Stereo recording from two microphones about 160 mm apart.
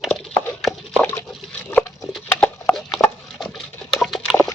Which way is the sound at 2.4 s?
10° left (ahead or behind).